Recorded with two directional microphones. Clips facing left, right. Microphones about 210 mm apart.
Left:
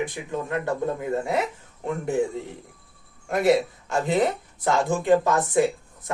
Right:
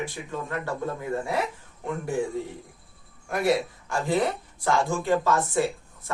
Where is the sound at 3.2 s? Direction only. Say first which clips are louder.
Left 4 dB; 25° left (ahead or behind).